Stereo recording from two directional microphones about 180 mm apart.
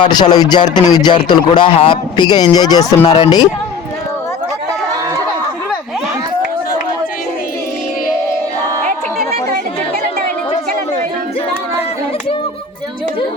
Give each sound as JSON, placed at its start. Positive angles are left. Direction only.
{"t": 0.0, "sound": "a man's voice", "side_deg": 25}